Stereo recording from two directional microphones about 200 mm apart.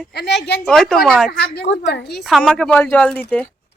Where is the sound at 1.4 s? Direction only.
60° left (ahead or behind).